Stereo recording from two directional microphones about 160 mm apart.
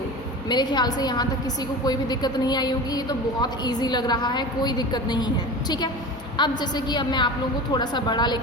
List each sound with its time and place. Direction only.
0.4 s a woman's voice: 25° left (ahead or behind)